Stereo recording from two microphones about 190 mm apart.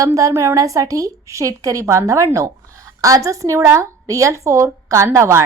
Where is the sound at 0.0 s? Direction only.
15° right (ahead or behind).